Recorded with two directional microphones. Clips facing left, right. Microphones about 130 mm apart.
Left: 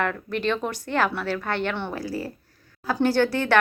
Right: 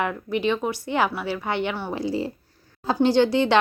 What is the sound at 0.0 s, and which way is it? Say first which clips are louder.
A woman's voice: right 2 dB; 10° right (ahead or behind).